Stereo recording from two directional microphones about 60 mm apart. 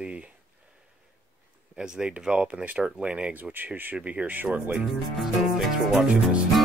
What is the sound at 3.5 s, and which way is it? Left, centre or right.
Speech, right.